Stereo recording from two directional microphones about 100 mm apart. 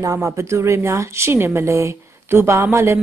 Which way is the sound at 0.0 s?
30° right (ahead or behind).